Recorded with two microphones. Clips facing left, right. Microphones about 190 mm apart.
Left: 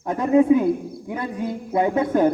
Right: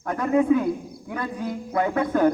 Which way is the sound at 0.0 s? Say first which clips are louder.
Left 4 dB; 20° left (ahead or behind).